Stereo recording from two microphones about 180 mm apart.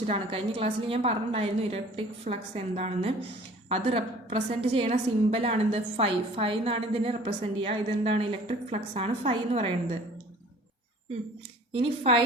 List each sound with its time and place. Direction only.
0.1 s a woman's voice: 30° right (ahead or behind)
11.7 s a woman's voice: 30° right (ahead or behind)